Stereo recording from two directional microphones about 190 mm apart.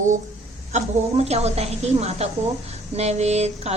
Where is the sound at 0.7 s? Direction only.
35° right (ahead or behind).